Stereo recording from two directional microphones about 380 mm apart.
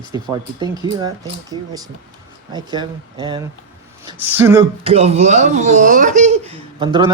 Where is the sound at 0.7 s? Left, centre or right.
Centre.